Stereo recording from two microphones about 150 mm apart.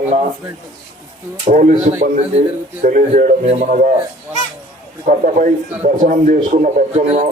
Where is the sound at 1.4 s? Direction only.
55° right (ahead or behind).